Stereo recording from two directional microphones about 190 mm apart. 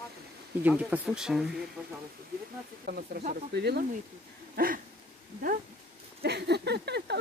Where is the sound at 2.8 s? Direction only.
50° right (ahead or behind).